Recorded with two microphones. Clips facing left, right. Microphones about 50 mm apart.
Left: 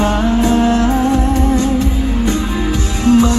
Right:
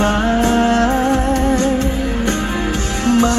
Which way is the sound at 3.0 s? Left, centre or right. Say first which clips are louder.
Left 4 dB; right.